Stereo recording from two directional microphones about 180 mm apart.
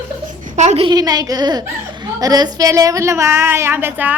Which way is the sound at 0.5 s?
40° right (ahead or behind).